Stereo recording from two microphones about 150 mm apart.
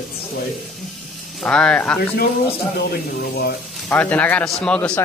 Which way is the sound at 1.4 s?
5° left (ahead or behind).